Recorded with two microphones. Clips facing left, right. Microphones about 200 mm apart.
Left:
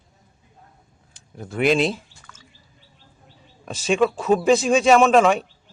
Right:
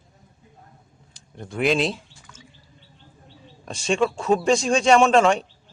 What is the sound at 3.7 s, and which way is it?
Speech, 5° left (ahead or behind).